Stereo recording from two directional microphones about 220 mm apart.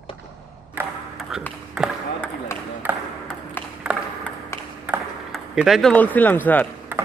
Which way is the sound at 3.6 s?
10° left (ahead or behind).